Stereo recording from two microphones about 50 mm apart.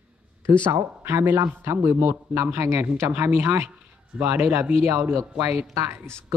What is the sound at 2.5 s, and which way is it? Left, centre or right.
Speech, right.